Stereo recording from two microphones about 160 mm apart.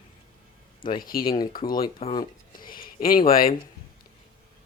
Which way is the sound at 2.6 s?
65° left (ahead or behind).